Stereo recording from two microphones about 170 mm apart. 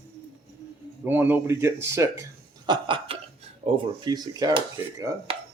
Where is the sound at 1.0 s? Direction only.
10° right (ahead or behind).